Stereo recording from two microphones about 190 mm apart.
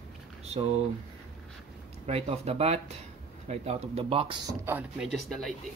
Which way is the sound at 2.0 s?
35° right (ahead or behind).